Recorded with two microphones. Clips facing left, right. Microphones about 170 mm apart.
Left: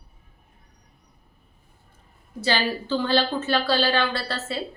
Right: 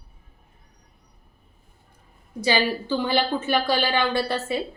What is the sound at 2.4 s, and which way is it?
A woman's voice, 15° right (ahead or behind).